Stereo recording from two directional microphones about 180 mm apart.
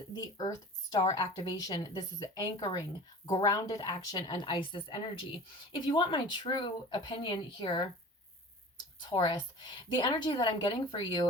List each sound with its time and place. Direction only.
0.1 s speech: 20° left (ahead or behind)
9.0 s speech: 25° left (ahead or behind)